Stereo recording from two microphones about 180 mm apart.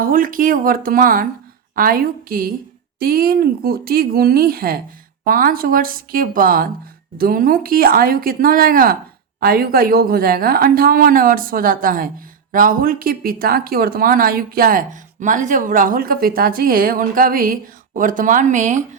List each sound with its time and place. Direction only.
0.0 s speech: 50° right (ahead or behind)